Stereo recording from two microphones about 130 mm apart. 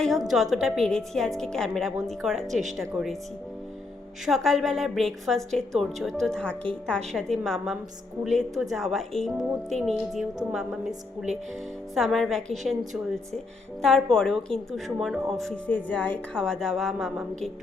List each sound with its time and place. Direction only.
0.0 s a woman's voice: centre (ahead or behind)
2.5 s speech: 65° right (ahead or behind)
2.7 s a woman's voice: centre (ahead or behind)
4.3 s a woman's voice: centre (ahead or behind)
11.9 s a woman's voice: centre (ahead or behind)
13.8 s a woman's voice: 5° left (ahead or behind)